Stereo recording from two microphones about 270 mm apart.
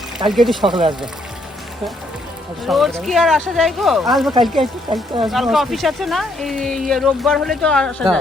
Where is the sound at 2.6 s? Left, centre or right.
Centre.